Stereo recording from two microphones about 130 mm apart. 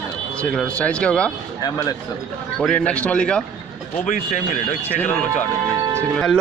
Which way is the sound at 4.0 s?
75° left (ahead or behind).